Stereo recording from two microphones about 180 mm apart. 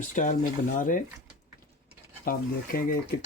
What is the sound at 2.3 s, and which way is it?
Speech, 55° left (ahead or behind).